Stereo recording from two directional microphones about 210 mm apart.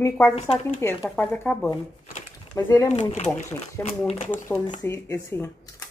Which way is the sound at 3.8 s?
30° left (ahead or behind).